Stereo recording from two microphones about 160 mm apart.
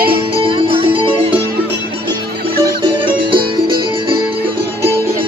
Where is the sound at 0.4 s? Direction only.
35° right (ahead or behind).